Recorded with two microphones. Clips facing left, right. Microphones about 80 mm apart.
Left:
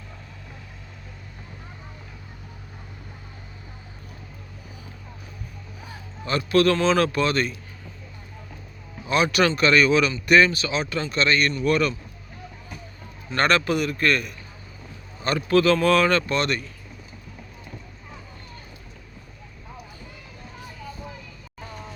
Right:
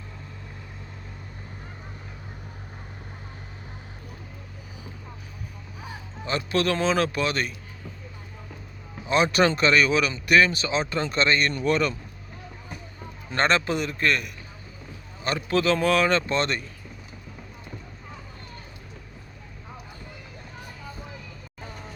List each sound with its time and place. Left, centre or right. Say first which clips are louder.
5.9 s speech: left 2 dB; right
9.0 s speech: even; right; by 10.5 s centre
10.5 s speech: even; right
13.3 s speech: left 2 dB; right